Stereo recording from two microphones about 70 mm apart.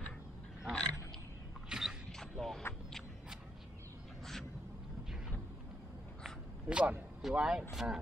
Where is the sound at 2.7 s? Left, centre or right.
Left.